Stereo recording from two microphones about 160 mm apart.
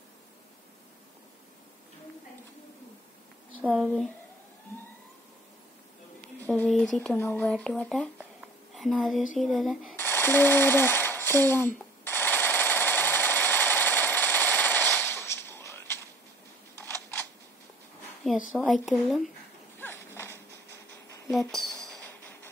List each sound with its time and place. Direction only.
3.6 s speech: 5° right (ahead or behind)
6.4 s speech: 5° left (ahead or behind)
9.9 s a sound: 15° left (ahead or behind)
18.2 s a woman's voice: centre (ahead or behind)
19.8 s a sound: 15° left (ahead or behind)
21.3 s speech: centre (ahead or behind)
22.0 s music: 10° left (ahead or behind)